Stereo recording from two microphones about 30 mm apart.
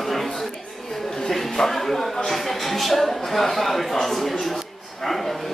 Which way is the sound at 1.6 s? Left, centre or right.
Centre.